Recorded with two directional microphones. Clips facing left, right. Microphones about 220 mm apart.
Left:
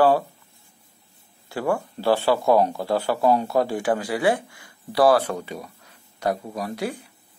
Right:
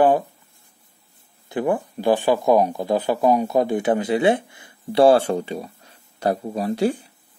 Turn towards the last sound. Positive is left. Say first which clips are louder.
# right 7 dB
turn(degrees=-30)  # may be behind; listen again after turning